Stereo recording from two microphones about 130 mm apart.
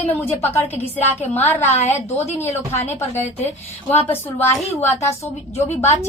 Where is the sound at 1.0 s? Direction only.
15° left (ahead or behind).